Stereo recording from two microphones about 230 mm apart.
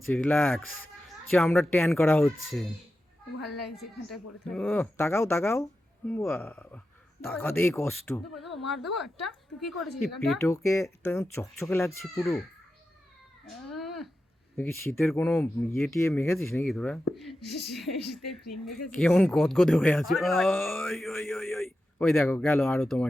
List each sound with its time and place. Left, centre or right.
0.1 s speech: centre
8.8 s speech: left
9.2 s speech: centre
10.4 s speech: centre
13.7 s a sound: centre
14.5 s speech: centre